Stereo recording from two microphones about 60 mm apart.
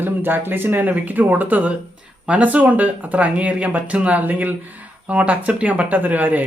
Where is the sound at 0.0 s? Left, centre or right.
Right.